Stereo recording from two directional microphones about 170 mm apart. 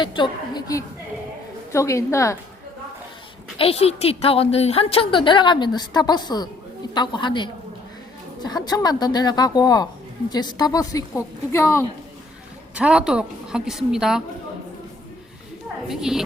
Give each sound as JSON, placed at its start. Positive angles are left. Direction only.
{"t": 0.0, "sound": "a woman's voice", "side_deg": 30}
{"t": 3.6, "sound": "a woman's voice", "side_deg": 35}
{"t": 12.7, "sound": "a woman's voice", "side_deg": -5}
{"t": 15.9, "sound": "a woman's voice", "side_deg": 0}